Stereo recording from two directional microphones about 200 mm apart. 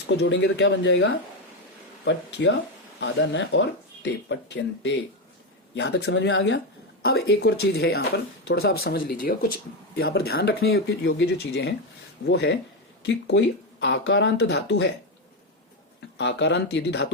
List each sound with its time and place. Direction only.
0.1 s speech: 60° left (ahead or behind)
3.0 s speech: 65° left (ahead or behind)
16.1 s speech: 60° left (ahead or behind)